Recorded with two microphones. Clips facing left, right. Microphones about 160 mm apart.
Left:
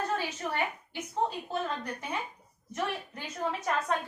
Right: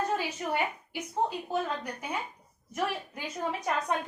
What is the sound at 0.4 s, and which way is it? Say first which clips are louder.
A woman's voice: right 3 dB; 15° right (ahead or behind).